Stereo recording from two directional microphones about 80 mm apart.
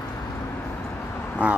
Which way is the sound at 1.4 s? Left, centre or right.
Centre.